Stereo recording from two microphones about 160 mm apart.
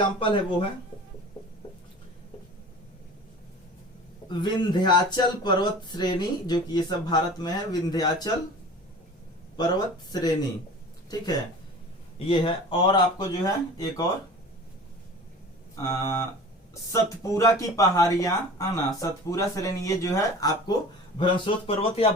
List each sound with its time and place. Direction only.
0.0 s speech: 30° left (ahead or behind)
4.3 s speech: 30° left (ahead or behind)
9.6 s speech: 25° left (ahead or behind)
12.2 s speech: 35° left (ahead or behind)
15.7 s speech: 20° left (ahead or behind)
21.2 s speech: 35° left (ahead or behind)